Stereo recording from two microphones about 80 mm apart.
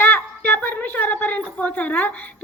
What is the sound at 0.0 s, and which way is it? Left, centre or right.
A woman's voice, centre.